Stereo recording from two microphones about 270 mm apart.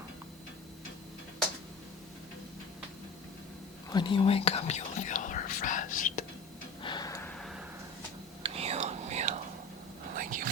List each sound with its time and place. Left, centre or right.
3.8 s whispering: centre
6.8 s gasp: centre
8.4 s whispering: right